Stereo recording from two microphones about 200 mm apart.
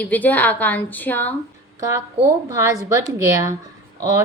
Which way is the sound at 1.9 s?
15° right (ahead or behind).